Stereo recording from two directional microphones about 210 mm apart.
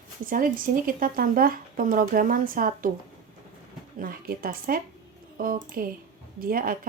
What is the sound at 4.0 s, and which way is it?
A woman's voice, 45° right (ahead or behind).